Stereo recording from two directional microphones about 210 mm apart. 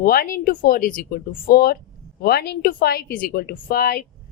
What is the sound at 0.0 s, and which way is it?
Speech, 45° left (ahead or behind).